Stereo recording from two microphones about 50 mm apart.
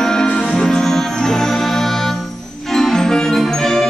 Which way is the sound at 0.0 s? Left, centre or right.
Centre.